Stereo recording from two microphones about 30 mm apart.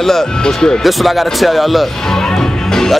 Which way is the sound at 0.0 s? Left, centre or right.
Centre.